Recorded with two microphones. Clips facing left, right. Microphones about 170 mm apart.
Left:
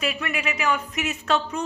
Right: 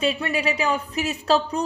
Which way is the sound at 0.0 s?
30° right (ahead or behind).